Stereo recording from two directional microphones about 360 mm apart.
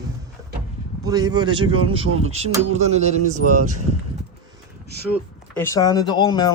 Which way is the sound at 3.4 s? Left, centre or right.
Right.